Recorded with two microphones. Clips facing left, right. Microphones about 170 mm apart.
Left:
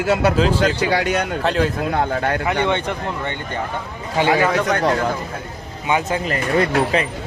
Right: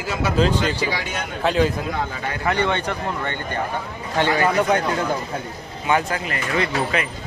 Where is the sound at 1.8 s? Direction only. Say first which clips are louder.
Left 6 dB; 60° left (ahead or behind).